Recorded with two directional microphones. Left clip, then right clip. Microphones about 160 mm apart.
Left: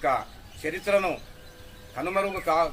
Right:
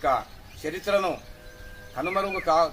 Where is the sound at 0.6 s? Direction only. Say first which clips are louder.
Even; 10° left (ahead or behind).